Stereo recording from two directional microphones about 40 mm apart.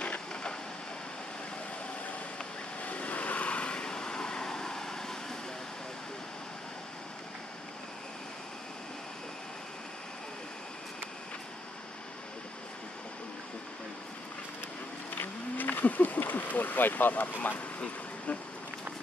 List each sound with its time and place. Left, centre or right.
0.3 s rain: centre
2.8 s vehicle: left; by 5.4 s centre
15.1 s speech: left
17.7 s a sound: left